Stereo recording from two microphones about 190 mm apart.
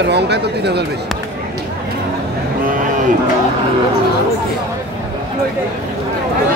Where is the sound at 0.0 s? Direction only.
60° right (ahead or behind).